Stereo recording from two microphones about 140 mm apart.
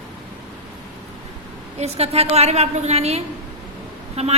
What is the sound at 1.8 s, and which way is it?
A woman's voice, 50° right (ahead or behind).